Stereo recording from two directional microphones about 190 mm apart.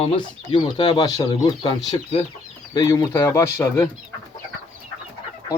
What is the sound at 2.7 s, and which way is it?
Speech, 20° left (ahead or behind).